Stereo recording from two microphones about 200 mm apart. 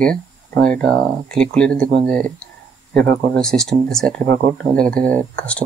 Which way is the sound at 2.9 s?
5° left (ahead or behind).